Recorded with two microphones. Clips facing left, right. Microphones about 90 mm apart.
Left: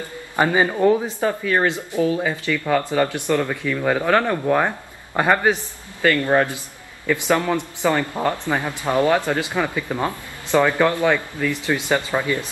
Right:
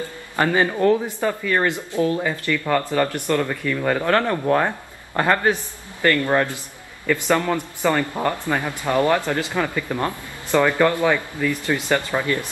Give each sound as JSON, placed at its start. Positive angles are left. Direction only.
{"t": 0.4, "sound": "speech", "side_deg": 15}
{"t": 11.0, "sound": "speech", "side_deg": -10}
{"t": 11.5, "sound": "speech", "side_deg": 20}